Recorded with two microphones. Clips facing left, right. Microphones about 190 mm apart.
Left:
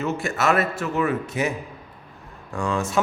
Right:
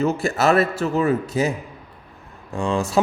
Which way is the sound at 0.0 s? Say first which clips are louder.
Right 4 dB; 35° right (ahead or behind).